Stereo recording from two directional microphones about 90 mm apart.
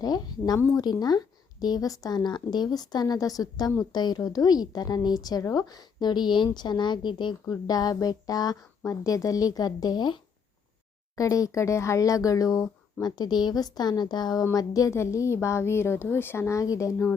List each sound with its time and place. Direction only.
0.0 s a woman's voice: 45° left (ahead or behind)
7.4 s a woman's voice: 45° left (ahead or behind)
11.2 s speech: 40° left (ahead or behind)